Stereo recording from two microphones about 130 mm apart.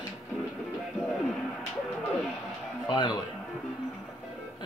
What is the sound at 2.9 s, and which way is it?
Speech, 35° left (ahead or behind).